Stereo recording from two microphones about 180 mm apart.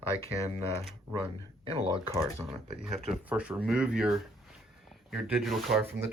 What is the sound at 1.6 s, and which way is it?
Speech, 30° right (ahead or behind).